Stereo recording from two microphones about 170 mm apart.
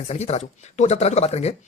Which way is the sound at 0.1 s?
40° left (ahead or behind).